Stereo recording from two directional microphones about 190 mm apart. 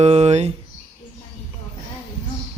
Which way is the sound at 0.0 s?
35° right (ahead or behind).